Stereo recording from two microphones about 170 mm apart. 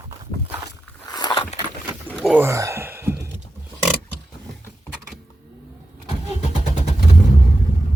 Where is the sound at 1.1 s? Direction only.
20° left (ahead or behind).